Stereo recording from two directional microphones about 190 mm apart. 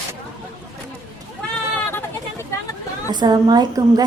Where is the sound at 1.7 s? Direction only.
10° left (ahead or behind).